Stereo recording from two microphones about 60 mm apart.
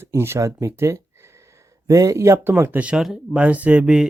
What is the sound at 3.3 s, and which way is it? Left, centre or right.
Speech, right.